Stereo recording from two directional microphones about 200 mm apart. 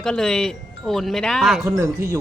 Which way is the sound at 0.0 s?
5° left (ahead or behind).